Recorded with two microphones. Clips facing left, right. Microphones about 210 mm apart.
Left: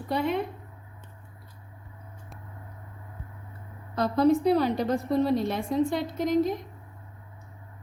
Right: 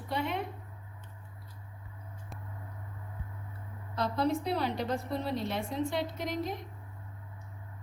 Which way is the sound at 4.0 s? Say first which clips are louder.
Left 8 dB; 45° left (ahead or behind).